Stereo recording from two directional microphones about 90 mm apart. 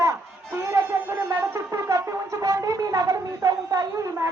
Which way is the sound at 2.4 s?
40° right (ahead or behind).